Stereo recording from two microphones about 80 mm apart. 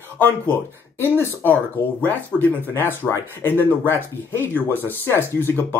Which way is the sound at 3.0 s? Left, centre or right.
Centre.